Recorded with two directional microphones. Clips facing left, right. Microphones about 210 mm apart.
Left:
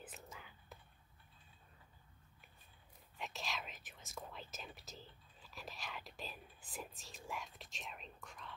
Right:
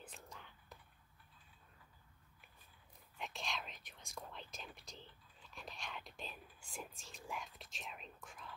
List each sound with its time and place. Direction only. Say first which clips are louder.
0.0 s whispering: left 1 dB; 5° left (ahead or behind)
3.2 s speech: even; centre (ahead or behind)